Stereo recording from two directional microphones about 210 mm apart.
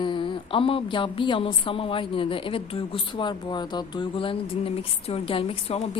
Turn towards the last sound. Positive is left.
turn(degrees=30)  # may be behind; listen again after turning